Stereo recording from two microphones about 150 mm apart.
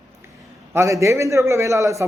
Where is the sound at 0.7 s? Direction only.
20° right (ahead or behind).